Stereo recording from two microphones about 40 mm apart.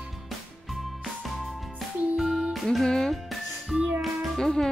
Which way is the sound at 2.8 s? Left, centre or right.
Centre.